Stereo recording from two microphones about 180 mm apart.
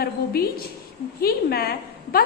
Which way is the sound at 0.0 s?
55° left (ahead or behind).